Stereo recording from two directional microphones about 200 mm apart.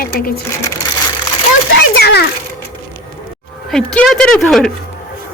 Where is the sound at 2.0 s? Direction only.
55° left (ahead or behind).